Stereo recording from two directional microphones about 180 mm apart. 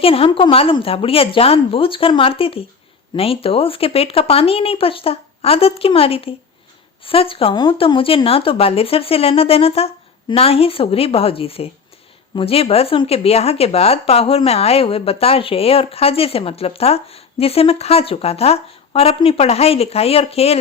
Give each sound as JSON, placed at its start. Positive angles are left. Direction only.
{"t": 0.0, "sound": "speech", "side_deg": 30}